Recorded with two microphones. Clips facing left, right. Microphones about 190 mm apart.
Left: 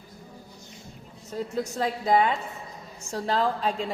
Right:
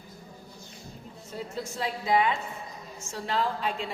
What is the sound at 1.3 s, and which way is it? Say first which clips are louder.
A woman's voice: left 6 dB; 40° left (ahead or behind).